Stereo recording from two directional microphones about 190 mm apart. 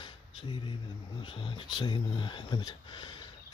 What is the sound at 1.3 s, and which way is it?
Speech, 30° left (ahead or behind).